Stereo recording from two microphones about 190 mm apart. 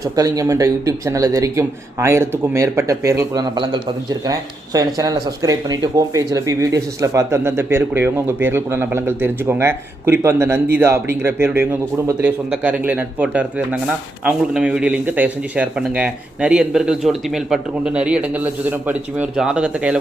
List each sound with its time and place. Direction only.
0.0 s speech: 20° right (ahead or behind)